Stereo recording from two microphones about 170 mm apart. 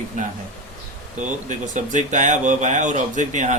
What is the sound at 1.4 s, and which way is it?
Speech, 45° right (ahead or behind).